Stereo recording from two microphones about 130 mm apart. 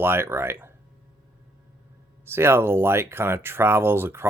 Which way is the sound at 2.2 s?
20° right (ahead or behind).